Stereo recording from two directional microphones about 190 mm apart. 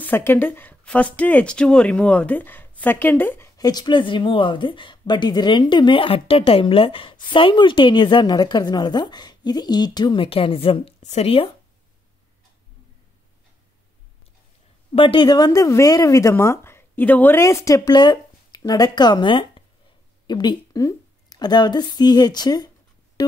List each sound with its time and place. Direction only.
0.0 s a woman's voice: 10° left (ahead or behind); by 11.5 s 30° left (ahead or behind)
14.9 s a woman's voice: 30° left (ahead or behind)